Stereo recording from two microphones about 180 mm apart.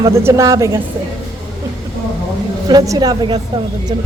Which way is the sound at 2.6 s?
20° right (ahead or behind).